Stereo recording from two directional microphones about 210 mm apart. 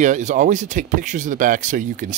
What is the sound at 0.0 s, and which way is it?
Speech, 35° right (ahead or behind).